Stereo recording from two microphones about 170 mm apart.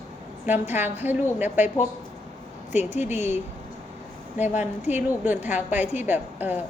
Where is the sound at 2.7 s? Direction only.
40° left (ahead or behind).